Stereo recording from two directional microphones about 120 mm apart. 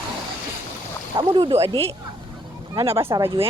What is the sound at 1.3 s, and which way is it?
Speech, 45° right (ahead or behind).